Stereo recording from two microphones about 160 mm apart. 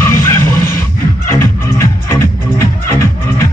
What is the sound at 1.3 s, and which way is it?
Music, 15° left (ahead or behind).